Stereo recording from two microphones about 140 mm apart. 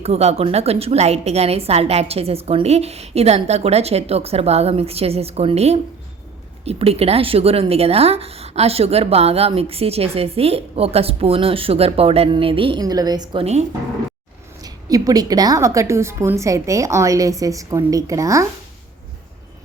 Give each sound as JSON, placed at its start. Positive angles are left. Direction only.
{"t": 0.0, "sound": "speech", "side_deg": -50}
{"t": 12.8, "sound": "a woman's voice", "side_deg": -25}
{"t": 13.4, "sound": "speech", "side_deg": -50}
{"t": 14.6, "sound": "a woman's voice", "side_deg": -25}